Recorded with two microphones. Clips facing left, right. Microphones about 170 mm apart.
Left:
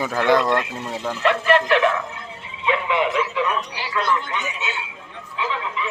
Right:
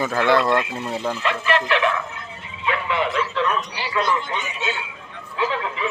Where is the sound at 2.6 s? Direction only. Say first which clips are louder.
Left 2 dB; 15° left (ahead or behind).